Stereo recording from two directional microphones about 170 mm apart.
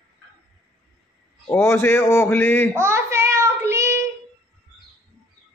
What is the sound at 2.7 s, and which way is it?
Child singing, 15° right (ahead or behind).